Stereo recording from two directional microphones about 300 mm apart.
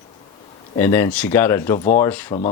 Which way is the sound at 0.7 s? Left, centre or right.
Centre.